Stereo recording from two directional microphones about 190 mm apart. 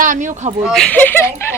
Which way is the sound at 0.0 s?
40° right (ahead or behind).